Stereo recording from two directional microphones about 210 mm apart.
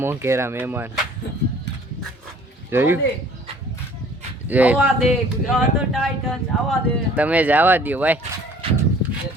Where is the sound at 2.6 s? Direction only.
10° right (ahead or behind).